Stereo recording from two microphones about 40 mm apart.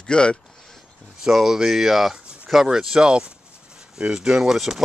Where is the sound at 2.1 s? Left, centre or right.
Right.